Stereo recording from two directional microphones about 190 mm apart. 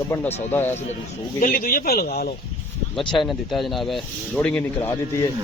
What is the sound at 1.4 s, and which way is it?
Speech, 50° left (ahead or behind).